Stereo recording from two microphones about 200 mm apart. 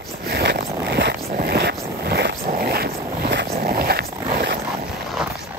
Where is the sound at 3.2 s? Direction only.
50° right (ahead or behind).